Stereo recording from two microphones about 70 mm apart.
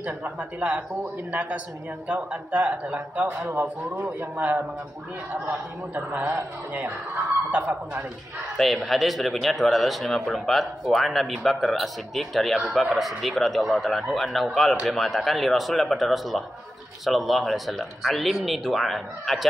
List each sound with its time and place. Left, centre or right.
0.0 s a man's voice: centre
5.9 s a man's voice: right
8.8 s speech: centre